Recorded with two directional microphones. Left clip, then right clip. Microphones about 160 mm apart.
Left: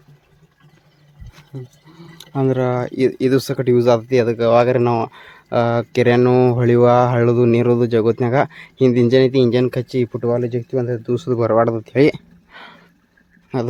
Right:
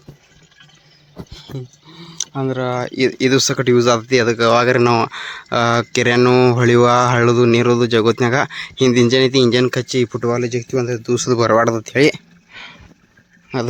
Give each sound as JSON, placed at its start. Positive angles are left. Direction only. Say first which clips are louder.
{"t": 1.9, "sound": "a sound", "louder": "right 12 dB", "side_deg": 0}
{"t": 2.3, "sound": "speech", "louder": "left 3 dB", "side_deg": 30}
{"t": 2.8, "sound": "speech", "louder": "even", "side_deg": 10}
{"t": 3.2, "sound": "speech", "louder": "right 2 dB", "side_deg": 0}
{"t": 12.5, "sound": "roaring cats", "louder": "right 3 dB", "side_deg": 30}